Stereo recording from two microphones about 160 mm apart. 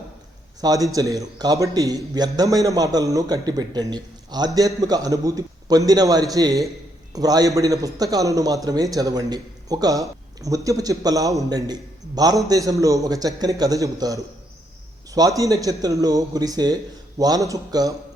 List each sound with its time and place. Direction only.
0.6 s a man's voice: 20° right (ahead or behind)
15.4 s a man's voice: 20° right (ahead or behind)